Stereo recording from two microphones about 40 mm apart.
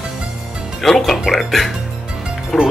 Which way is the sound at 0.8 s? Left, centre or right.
Centre.